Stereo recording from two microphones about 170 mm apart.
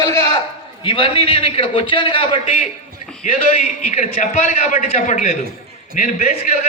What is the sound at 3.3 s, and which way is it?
A man's voice, 50° left (ahead or behind).